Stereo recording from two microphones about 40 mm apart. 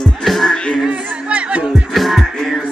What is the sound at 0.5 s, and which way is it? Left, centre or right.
Music, left.